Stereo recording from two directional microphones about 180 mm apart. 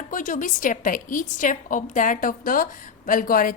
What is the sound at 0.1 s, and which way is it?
A woman's voice, 45° left (ahead or behind).